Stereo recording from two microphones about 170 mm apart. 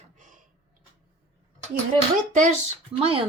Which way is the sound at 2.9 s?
35° right (ahead or behind).